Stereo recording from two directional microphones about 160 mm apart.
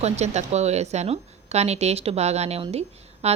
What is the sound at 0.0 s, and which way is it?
A woman's voice, 45° right (ahead or behind).